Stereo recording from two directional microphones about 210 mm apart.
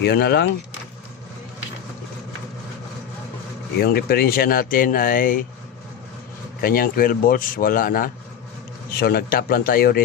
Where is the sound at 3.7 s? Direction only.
45° left (ahead or behind).